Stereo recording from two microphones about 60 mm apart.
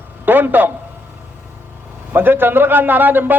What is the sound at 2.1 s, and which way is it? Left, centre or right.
A man's voice, right.